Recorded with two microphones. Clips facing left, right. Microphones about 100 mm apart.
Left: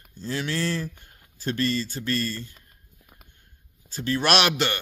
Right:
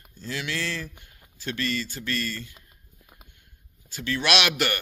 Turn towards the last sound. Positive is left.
turn(degrees=25)  # may be behind; listen again after turning